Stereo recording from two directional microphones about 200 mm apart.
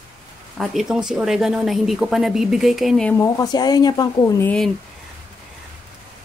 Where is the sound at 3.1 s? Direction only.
15° left (ahead or behind).